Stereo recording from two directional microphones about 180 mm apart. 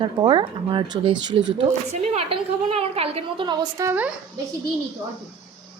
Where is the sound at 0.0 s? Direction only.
25° right (ahead or behind).